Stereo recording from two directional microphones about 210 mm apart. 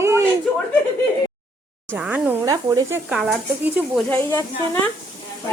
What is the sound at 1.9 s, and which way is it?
Speech, 5° right (ahead or behind).